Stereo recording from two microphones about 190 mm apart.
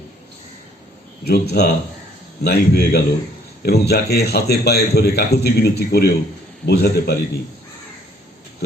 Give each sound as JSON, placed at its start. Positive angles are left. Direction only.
{"t": 1.2, "sound": "a man's voice", "side_deg": 55}